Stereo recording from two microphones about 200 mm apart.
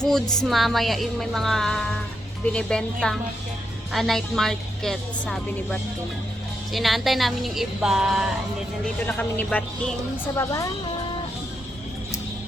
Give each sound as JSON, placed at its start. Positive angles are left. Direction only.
{"t": 0.0, "sound": "speech", "side_deg": 5}
{"t": 9.0, "sound": "speech", "side_deg": 10}